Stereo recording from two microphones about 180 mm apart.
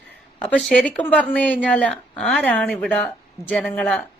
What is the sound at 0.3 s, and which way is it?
A woman's voice, 5° left (ahead or behind).